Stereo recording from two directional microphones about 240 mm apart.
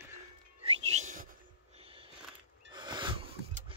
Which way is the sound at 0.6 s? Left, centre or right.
Right.